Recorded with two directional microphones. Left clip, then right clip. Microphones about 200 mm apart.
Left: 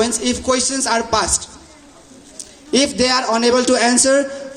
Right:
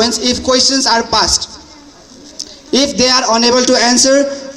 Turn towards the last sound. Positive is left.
turn(degrees=-35)  # may be behind; listen again after turning